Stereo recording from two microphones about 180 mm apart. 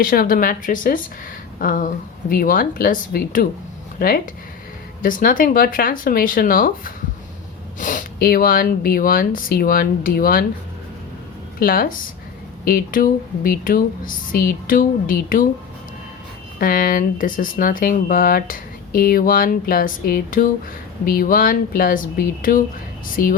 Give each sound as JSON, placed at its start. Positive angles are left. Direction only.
{"t": 0.0, "sound": "speech", "side_deg": 55}
{"t": 5.0, "sound": "speech", "side_deg": 50}
{"t": 11.6, "sound": "speech", "side_deg": 50}
{"t": 16.6, "sound": "speech", "side_deg": 50}